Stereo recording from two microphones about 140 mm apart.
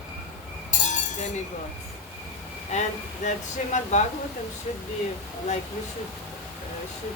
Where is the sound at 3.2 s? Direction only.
60° left (ahead or behind).